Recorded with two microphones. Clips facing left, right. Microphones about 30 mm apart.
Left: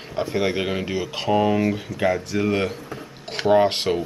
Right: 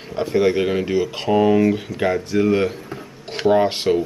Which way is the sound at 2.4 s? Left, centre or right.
Centre.